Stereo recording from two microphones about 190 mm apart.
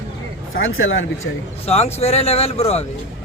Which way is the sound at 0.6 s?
90° left.